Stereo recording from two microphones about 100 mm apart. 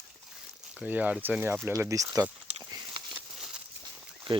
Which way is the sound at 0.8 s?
15° right (ahead or behind).